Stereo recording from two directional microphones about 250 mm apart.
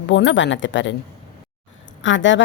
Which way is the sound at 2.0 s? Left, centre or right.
Left.